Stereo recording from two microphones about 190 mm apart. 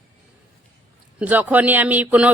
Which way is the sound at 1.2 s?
10° right (ahead or behind).